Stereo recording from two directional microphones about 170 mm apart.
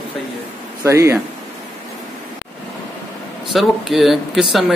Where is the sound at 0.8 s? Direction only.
15° right (ahead or behind).